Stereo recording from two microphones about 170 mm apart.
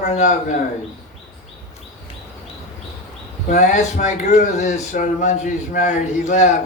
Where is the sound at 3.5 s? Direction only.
45° left (ahead or behind).